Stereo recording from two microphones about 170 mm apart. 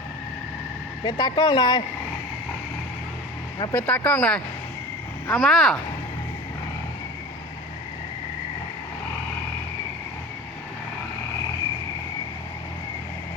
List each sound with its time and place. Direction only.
1.0 s speech: 25° left (ahead or behind)
3.6 s speech: 15° left (ahead or behind)